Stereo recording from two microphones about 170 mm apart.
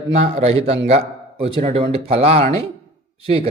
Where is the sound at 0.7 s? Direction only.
40° right (ahead or behind).